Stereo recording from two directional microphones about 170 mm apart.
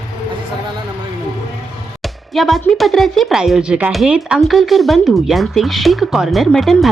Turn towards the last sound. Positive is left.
turn(degrees=0)  # may be behind; listen again after turning